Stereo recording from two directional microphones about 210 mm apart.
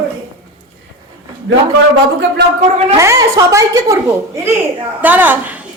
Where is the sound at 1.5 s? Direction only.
60° right (ahead or behind).